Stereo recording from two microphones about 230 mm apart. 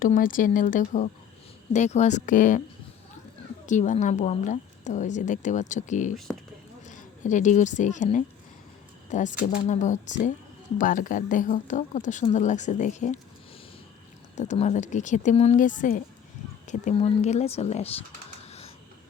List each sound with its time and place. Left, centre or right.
0.0 s speech: left
3.7 s a woman's voice: left
14.3 s speech: left
18.4 s a sound: left